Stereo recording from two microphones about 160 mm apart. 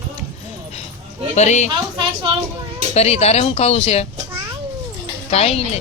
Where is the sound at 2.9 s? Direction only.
40° left (ahead or behind).